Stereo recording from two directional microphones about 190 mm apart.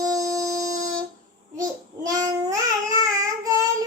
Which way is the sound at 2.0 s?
20° right (ahead or behind).